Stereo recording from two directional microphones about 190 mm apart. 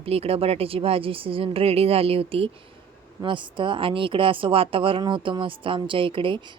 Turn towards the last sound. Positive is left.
turn(degrees=-25)  # may be behind; listen again after turning